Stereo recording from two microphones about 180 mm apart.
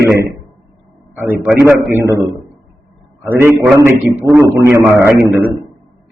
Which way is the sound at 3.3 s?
10° right (ahead or behind).